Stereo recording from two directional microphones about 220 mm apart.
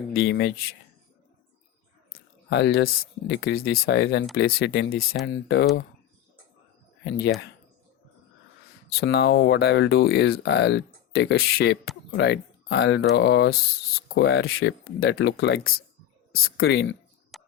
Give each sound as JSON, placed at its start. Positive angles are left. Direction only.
{"t": 0.2, "sound": "speech", "side_deg": 50}
{"t": 2.5, "sound": "speech", "side_deg": 50}
{"t": 7.0, "sound": "speech", "side_deg": 50}
{"t": 9.0, "sound": "speech", "side_deg": 50}
{"t": 17.3, "sound": "a sound", "side_deg": 0}